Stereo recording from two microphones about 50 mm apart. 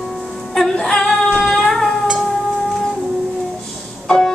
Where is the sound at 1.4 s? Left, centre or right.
Centre.